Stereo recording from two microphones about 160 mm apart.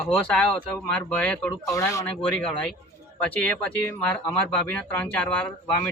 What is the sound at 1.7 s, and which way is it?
Speech, 20° left (ahead or behind).